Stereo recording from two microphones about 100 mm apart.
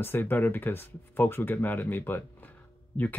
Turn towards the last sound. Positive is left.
turn(degrees=15)  # may be behind; listen again after turning